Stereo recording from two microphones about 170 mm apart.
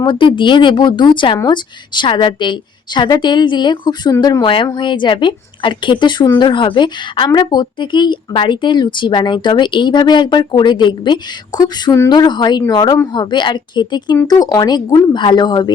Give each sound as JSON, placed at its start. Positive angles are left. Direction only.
{"t": 0.0, "sound": "speech", "side_deg": 30}